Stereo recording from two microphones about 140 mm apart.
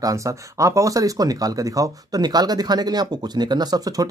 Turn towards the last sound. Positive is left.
turn(degrees=-25)  # may be behind; listen again after turning